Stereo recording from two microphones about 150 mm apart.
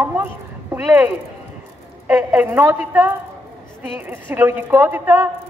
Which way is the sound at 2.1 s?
10° right (ahead or behind).